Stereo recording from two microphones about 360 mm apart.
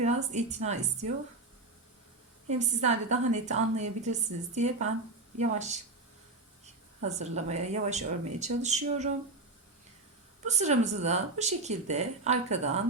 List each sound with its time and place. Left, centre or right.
0.0 s a woman's voice: centre
2.5 s a woman's voice: centre
7.0 s a woman's voice: centre
10.4 s a woman's voice: centre